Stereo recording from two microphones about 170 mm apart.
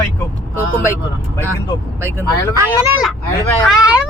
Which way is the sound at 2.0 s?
15° right (ahead or behind).